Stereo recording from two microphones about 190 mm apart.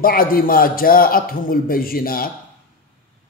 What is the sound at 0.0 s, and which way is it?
A man's voice, 50° left (ahead or behind).